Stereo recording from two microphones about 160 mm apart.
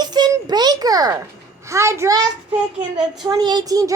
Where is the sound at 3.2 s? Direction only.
25° right (ahead or behind).